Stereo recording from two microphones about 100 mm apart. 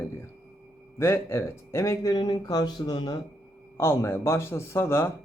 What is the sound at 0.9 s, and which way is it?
Speech, 25° left (ahead or behind).